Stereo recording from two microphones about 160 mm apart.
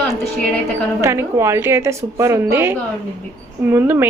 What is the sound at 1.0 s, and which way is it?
A woman's voice, 15° right (ahead or behind).